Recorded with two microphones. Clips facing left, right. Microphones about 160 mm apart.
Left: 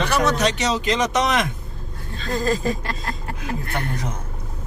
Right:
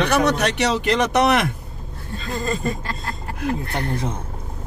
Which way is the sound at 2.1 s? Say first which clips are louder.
Left 3 dB; centre (ahead or behind).